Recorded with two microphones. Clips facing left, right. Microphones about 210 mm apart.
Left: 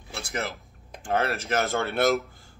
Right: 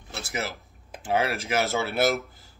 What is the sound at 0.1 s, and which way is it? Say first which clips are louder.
Speech: even; 5° right (ahead or behind).